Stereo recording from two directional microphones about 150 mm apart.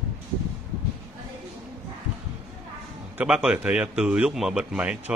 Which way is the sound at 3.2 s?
5° right (ahead or behind).